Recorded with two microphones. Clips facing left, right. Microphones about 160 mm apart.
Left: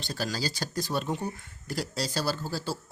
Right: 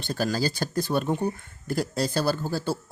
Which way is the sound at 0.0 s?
50° right (ahead or behind).